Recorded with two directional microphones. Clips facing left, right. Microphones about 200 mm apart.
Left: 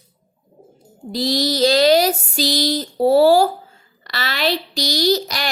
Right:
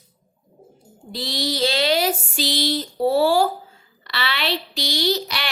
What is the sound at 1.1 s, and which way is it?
A woman's voice, 40° left (ahead or behind).